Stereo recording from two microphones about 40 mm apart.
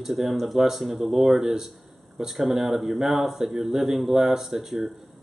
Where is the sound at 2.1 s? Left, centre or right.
Centre.